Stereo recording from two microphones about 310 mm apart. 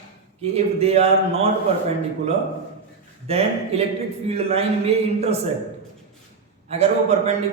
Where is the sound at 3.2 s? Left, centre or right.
Centre.